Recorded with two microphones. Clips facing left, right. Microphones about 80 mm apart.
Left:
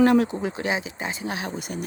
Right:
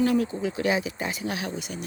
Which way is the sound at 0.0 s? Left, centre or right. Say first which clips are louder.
Left 5 dB; left.